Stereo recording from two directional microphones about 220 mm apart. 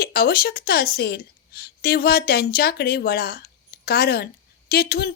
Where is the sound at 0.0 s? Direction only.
45° left (ahead or behind).